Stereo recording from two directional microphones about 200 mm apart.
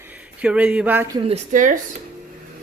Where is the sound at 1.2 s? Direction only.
35° right (ahead or behind).